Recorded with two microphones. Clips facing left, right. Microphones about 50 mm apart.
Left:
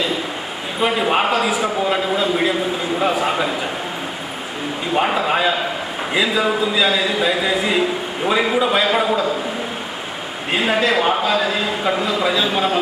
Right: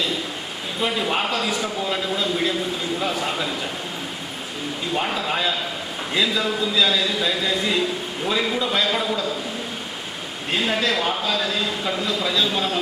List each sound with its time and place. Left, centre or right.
0.8 s a man's voice: left
1.5 s a man's voice: centre
4.9 s a man's voice: left
10.5 s a man's voice: centre